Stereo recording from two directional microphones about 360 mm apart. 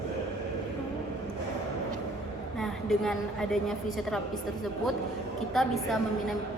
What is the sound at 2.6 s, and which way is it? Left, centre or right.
A woman's voice, centre.